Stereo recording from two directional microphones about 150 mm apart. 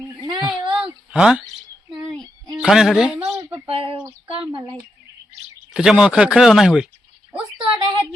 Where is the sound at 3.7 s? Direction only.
35° right (ahead or behind).